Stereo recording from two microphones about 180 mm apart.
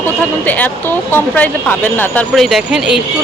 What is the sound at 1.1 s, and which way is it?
Speech, 10° left (ahead or behind).